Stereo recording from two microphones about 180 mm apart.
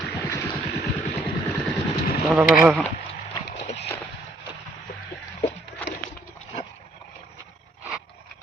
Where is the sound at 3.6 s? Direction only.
40° left (ahead or behind).